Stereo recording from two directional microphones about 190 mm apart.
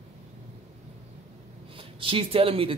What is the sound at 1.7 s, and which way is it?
Speech, 30° right (ahead or behind).